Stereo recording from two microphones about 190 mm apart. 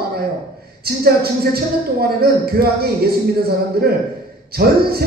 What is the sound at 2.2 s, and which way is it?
A man's voice, 55° right (ahead or behind).